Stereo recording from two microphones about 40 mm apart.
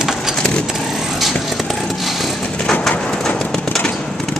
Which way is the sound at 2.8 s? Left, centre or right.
Centre.